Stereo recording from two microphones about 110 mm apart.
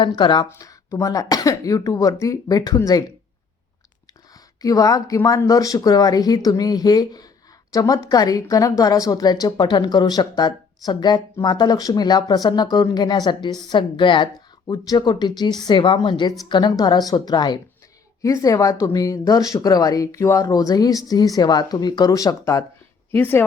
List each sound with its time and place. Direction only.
0.1 s a woman's voice: 45° left (ahead or behind)
0.6 s speech: 30° left (ahead or behind)
4.6 s a woman's voice: 30° left (ahead or behind)
23.1 s a woman's voice: 15° left (ahead or behind)